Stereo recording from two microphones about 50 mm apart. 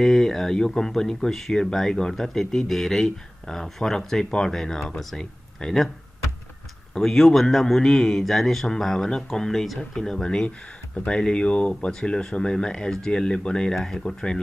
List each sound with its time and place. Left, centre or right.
0.0 s speech: centre
6.9 s speech: centre